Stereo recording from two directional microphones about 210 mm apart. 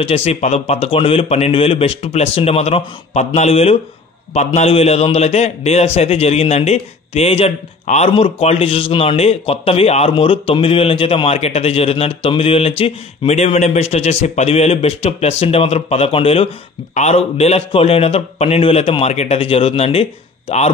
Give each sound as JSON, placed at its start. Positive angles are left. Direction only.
{"t": 0.0, "sound": "a man's voice", "side_deg": 30}